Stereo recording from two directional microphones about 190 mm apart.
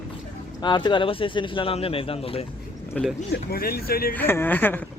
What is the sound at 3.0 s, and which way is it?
Speech, 10° left (ahead or behind).